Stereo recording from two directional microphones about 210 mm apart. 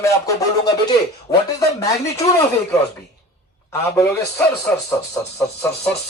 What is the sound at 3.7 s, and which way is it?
Speech, 10° left (ahead or behind).